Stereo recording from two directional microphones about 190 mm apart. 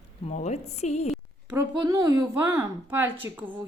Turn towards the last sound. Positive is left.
turn(degrees=-10)  # may be behind; listen again after turning